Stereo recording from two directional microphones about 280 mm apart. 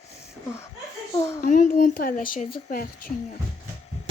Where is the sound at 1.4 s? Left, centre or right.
Left.